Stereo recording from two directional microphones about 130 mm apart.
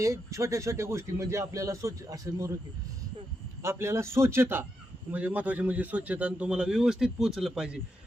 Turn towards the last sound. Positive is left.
turn(degrees=-5)  # may be behind; listen again after turning